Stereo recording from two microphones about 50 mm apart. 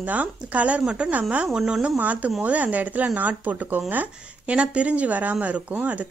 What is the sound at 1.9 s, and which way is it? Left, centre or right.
Speech, right.